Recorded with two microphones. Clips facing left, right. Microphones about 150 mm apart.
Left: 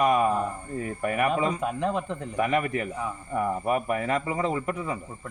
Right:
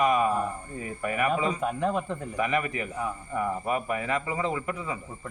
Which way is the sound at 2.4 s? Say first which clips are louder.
Left 3 dB; 50° left (ahead or behind).